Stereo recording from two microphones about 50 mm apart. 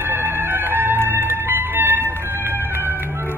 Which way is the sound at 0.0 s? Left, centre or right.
Right.